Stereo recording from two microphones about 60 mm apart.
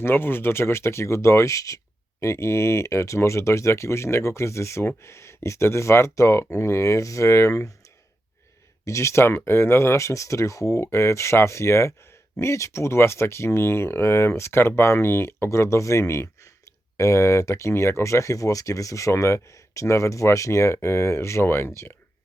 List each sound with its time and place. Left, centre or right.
0.0 s speech: left
2.2 s speech: left
8.8 s speech: left
10.9 s speech: left